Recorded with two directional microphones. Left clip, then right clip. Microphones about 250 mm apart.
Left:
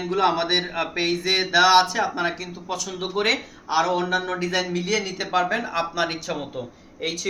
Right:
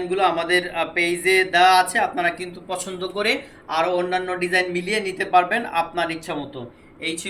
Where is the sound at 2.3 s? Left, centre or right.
Centre.